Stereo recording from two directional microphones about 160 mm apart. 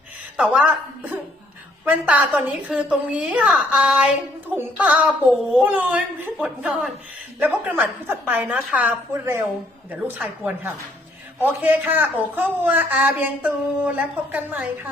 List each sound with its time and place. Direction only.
0.3 s a woman's voice: 5° right (ahead or behind)